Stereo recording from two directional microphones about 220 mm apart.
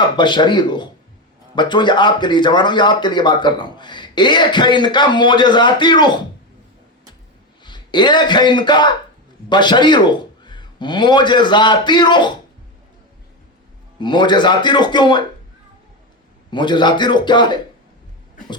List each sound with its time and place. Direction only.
0.2 s speech: 20° left (ahead or behind)
7.6 s a man's voice: 20° left (ahead or behind)
14.0 s speech: 20° left (ahead or behind)
16.5 s speech: 20° left (ahead or behind)